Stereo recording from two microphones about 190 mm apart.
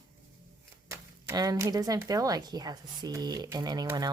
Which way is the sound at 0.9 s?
20° right (ahead or behind).